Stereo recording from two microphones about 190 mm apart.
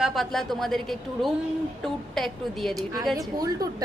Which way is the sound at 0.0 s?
Centre (ahead or behind).